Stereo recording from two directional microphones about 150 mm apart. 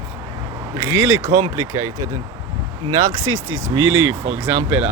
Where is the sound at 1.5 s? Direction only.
25° right (ahead or behind).